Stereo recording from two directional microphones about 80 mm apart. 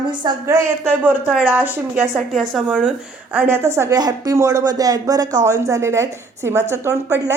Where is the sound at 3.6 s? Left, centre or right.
Right.